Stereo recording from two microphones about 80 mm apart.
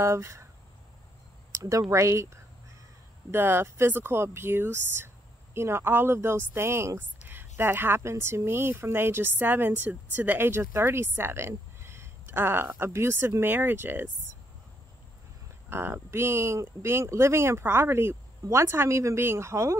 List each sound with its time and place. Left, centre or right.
0.0 s speech: right
1.5 s speech: right
15.7 s speech: right